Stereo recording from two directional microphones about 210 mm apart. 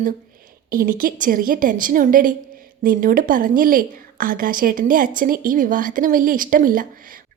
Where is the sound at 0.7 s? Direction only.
40° right (ahead or behind).